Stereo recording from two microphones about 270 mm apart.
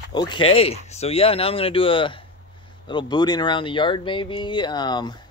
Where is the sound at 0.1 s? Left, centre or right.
Centre.